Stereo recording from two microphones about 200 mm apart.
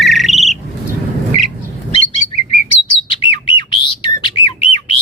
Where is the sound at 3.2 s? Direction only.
25° left (ahead or behind).